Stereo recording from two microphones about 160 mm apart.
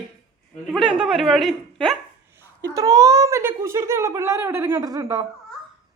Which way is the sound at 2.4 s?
20° right (ahead or behind).